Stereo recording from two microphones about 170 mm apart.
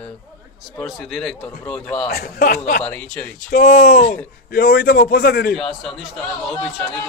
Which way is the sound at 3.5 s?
50° left (ahead or behind).